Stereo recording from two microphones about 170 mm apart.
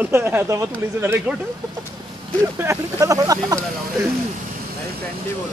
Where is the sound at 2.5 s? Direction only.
15° right (ahead or behind).